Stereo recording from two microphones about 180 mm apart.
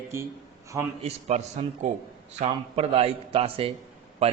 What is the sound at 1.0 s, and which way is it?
A man's voice, 40° right (ahead or behind).